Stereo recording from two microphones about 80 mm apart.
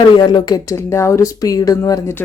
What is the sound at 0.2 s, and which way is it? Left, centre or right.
Speech, left.